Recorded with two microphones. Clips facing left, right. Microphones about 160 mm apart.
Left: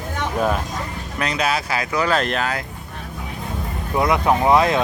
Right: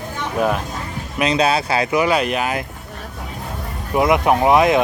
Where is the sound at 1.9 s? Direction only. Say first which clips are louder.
Right 1 dB; 10° right (ahead or behind).